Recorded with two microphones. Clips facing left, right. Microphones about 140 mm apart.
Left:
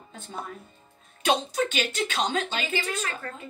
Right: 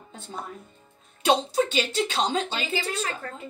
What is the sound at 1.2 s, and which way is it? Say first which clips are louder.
A woman's voice: right 3 dB; 30° right (ahead or behind).